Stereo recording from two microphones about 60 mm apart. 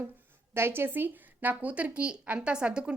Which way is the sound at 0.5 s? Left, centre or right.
Right.